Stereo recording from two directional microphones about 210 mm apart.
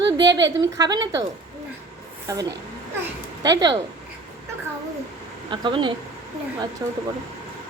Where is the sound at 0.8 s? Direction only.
20° right (ahead or behind).